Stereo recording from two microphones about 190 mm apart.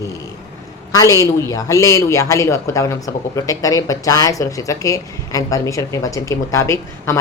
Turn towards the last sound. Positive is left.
turn(degrees=15)  # may be behind; listen again after turning